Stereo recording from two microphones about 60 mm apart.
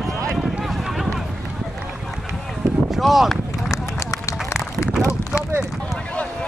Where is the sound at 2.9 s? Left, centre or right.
Centre.